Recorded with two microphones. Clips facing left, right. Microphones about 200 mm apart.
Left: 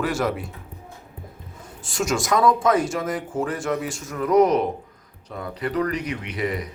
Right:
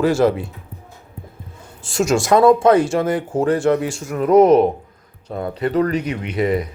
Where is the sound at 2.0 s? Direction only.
25° right (ahead or behind).